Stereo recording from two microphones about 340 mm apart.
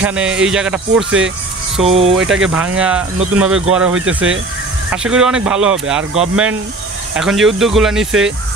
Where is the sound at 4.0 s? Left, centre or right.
Right.